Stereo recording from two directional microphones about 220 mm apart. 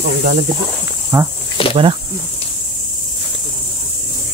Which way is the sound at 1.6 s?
25° left (ahead or behind).